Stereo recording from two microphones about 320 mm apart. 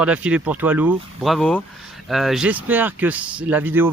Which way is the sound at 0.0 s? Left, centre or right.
Centre.